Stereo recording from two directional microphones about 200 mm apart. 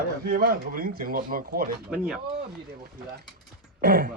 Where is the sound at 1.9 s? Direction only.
Centre (ahead or behind).